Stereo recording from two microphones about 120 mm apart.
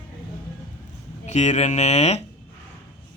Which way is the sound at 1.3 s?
70° left (ahead or behind).